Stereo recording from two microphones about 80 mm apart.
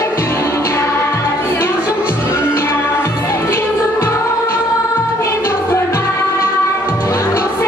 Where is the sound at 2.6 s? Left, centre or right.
Left.